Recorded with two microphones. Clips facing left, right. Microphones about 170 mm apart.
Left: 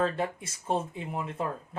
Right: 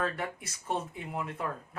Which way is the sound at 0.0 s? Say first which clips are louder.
Left 5 dB; 25° left (ahead or behind).